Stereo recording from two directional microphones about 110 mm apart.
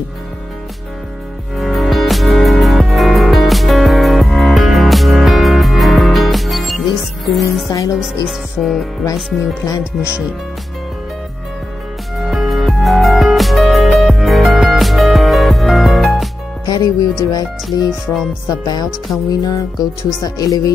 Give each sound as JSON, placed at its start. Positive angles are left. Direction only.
{"t": 1.6, "sound": "music", "side_deg": 0}
{"t": 7.7, "sound": "music", "side_deg": 30}
{"t": 8.3, "sound": "speech", "side_deg": 0}
{"t": 9.7, "sound": "speech", "side_deg": 25}
{"t": 12.2, "sound": "music", "side_deg": 0}
{"t": 16.6, "sound": "speech", "side_deg": 35}
{"t": 18.5, "sound": "music", "side_deg": 40}